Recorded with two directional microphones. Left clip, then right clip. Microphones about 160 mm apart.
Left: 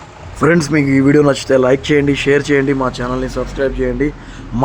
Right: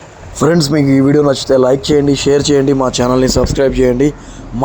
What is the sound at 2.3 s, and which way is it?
Speech, 15° right (ahead or behind).